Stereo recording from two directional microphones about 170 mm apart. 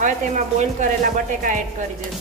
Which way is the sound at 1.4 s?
50° right (ahead or behind).